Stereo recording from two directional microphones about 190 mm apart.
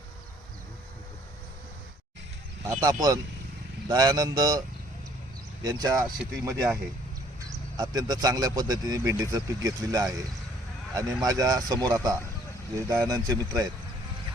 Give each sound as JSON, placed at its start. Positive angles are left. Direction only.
{"t": 2.6, "sound": "speech", "side_deg": -20}
{"t": 5.6, "sound": "speech", "side_deg": -20}
{"t": 7.8, "sound": "speech", "side_deg": -20}